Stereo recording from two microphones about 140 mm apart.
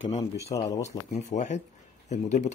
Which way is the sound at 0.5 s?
25° left (ahead or behind).